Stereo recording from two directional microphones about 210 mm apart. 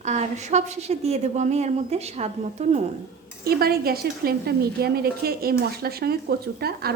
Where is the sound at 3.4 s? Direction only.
45° right (ahead or behind).